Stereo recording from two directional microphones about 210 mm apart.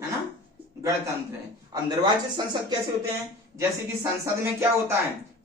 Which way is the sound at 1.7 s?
20° right (ahead or behind).